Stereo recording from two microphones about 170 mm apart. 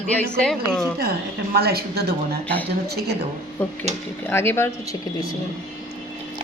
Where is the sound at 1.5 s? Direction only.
65° right (ahead or behind).